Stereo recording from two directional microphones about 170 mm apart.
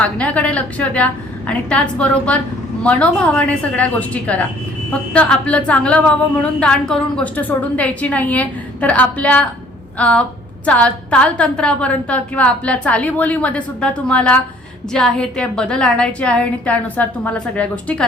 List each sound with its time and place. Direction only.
0.0 s a woman's voice: 10° left (ahead or behind)